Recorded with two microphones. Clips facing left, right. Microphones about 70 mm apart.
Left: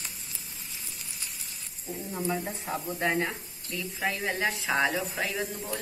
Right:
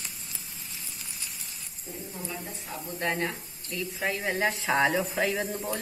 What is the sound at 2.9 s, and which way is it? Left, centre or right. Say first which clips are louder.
Speech: left 1 dB; centre.